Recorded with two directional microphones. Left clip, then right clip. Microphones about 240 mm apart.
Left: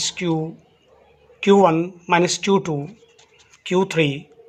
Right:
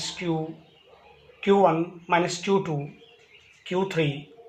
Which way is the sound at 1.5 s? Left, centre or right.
Left.